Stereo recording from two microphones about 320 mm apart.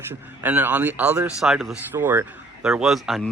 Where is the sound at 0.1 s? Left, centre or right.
Centre.